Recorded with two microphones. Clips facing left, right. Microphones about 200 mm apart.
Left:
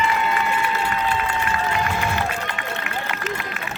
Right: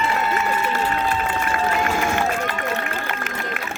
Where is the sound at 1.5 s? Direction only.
50° right (ahead or behind).